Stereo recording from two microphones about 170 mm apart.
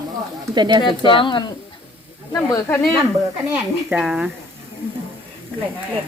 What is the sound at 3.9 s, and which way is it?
Speech, 5° right (ahead or behind).